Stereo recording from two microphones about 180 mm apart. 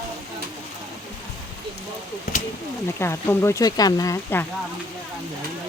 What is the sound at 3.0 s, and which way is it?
Speech, 15° left (ahead or behind).